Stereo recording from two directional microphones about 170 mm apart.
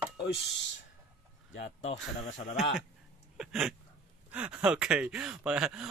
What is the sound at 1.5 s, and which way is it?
Speech, 90° left.